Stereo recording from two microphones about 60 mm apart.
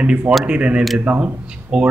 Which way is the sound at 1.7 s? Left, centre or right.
Centre.